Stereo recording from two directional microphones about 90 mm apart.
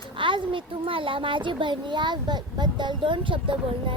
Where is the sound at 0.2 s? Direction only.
65° right (ahead or behind).